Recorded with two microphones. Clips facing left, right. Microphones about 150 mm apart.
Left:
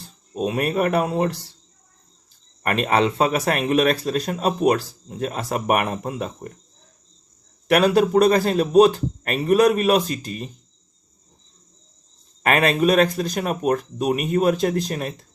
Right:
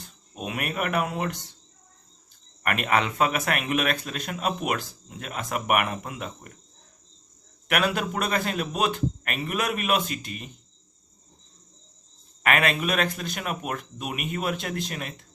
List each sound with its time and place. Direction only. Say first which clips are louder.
0.0 s speech: left 11 dB; 30° left (ahead or behind)
2.6 s speech: left 5 dB; 30° left (ahead or behind)
7.7 s speech: left 10 dB; 35° left (ahead or behind)
12.4 s speech: left 6 dB; 35° left (ahead or behind)